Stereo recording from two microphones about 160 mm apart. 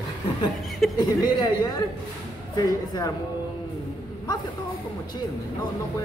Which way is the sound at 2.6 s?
20° left (ahead or behind).